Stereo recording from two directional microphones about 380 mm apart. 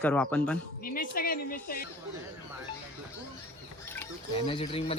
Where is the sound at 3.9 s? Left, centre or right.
Centre.